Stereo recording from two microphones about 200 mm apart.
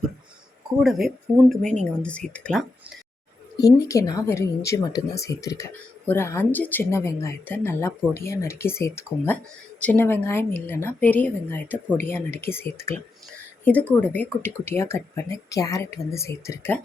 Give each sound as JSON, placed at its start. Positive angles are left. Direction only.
{"t": 0.8, "sound": "speech", "side_deg": 0}
{"t": 3.6, "sound": "speech", "side_deg": 15}